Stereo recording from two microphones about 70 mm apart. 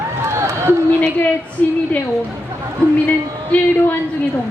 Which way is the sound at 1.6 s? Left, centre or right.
Centre.